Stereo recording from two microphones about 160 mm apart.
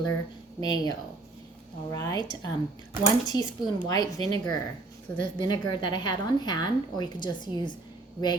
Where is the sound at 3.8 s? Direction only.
25° left (ahead or behind).